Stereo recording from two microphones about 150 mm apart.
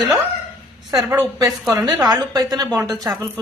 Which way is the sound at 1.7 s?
25° right (ahead or behind).